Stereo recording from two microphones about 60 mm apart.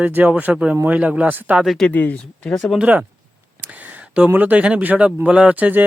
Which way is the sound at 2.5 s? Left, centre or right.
Centre.